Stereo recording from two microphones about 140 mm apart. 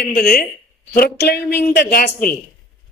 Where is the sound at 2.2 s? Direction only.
90° left.